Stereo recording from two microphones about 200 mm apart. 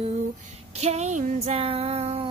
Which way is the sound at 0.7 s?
35° right (ahead or behind).